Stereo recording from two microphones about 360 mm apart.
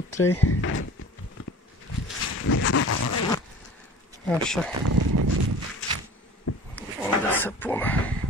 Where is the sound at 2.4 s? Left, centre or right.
Left.